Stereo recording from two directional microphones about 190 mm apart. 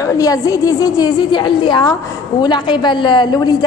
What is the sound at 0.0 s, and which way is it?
A woman's voice, 20° left (ahead or behind).